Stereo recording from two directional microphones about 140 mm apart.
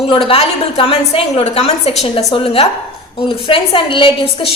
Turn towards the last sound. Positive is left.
turn(degrees=40)  # may be behind; listen again after turning